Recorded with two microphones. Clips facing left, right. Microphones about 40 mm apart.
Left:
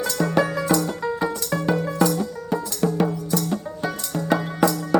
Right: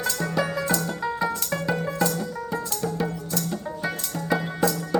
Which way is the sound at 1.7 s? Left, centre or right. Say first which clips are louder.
Left 4 dB; centre.